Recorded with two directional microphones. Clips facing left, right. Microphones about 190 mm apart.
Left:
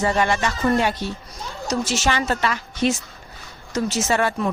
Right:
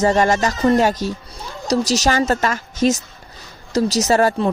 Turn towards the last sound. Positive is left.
turn(degrees=-40)  # may be behind; listen again after turning